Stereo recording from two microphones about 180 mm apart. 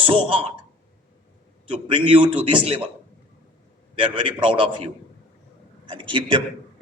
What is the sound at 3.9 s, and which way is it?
Speech, 30° right (ahead or behind).